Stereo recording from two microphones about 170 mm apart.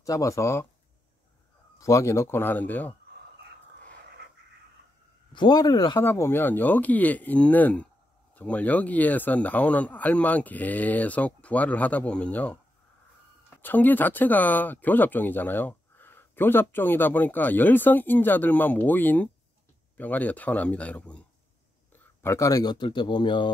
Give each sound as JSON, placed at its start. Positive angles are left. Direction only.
{"t": 0.0, "sound": "speech", "side_deg": 20}
{"t": 1.8, "sound": "speech", "side_deg": 20}
{"t": 5.3, "sound": "speech", "side_deg": 25}
{"t": 13.6, "sound": "speech", "side_deg": 10}